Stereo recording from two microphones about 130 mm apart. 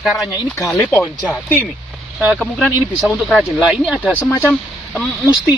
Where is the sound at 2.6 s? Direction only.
10° left (ahead or behind); by 4.1 s 5° right (ahead or behind).